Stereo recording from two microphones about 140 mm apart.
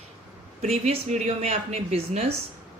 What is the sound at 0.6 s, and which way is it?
Speech, 55° right (ahead or behind).